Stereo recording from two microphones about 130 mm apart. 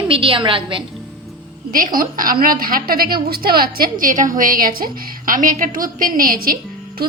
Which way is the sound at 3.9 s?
85° right.